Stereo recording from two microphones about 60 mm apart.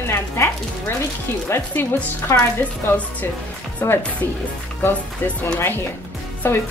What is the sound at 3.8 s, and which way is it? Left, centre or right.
Speech, left.